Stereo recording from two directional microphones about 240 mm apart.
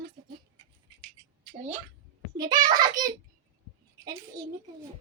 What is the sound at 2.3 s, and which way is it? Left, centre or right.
Speech, centre.